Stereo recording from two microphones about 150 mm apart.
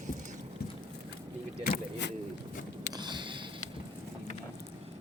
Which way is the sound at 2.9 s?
30° right (ahead or behind).